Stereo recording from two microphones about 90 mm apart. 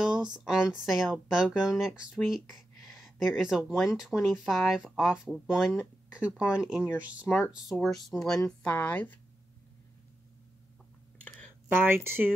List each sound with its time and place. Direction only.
0.0 s speech: 10° right (ahead or behind)
7.8 s speech: centre (ahead or behind)
8.5 s speech: 15° left (ahead or behind)
11.7 s speech: 25° right (ahead or behind)